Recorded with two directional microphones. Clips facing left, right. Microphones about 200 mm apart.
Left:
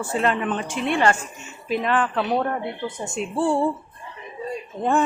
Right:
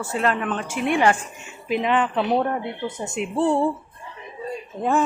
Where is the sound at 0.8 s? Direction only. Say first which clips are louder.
Right 2 dB; 15° right (ahead or behind).